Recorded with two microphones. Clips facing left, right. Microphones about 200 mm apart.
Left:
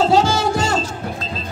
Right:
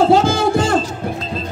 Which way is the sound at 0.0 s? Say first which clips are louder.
Right 3 dB; 55° right (ahead or behind).